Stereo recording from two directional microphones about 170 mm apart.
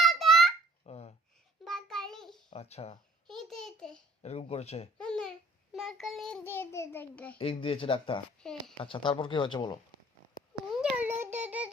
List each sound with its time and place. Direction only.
0.0 s babbling: centre (ahead or behind)
0.9 s a sound: 35° left (ahead or behind)
1.6 s child singing: centre (ahead or behind)
2.5 s speech: 40° left (ahead or behind)
3.2 s a sound: centre (ahead or behind)
4.2 s speech: 40° left (ahead or behind)
4.9 s babbling: 5° left (ahead or behind)
5.7 s child singing: centre (ahead or behind)
6.4 s a sound: 15° left (ahead or behind)
7.3 s speech: 35° left (ahead or behind)
8.4 s a child's voice: 5° left (ahead or behind)
8.8 s speech: 30° left (ahead or behind)
10.8 s a sound: 10° right (ahead or behind)
11.3 s child singing: 10° right (ahead or behind)